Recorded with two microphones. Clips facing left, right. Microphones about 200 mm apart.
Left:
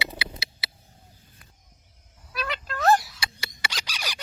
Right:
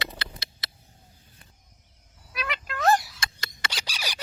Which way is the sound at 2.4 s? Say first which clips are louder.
Left 1 dB; centre (ahead or behind).